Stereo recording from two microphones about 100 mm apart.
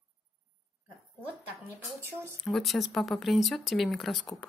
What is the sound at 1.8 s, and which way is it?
Speech, 25° right (ahead or behind).